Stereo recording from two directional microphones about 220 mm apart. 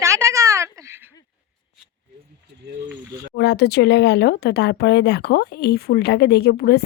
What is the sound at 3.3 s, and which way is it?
Speech, 50° left (ahead or behind).